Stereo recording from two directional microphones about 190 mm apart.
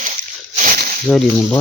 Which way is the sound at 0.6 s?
45° right (ahead or behind).